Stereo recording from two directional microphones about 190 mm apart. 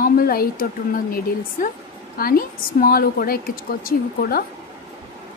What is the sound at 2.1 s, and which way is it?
A woman's voice, 50° left (ahead or behind).